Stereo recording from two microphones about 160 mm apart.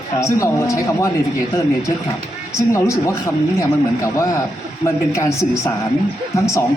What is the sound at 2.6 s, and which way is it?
Speech, 20° left (ahead or behind).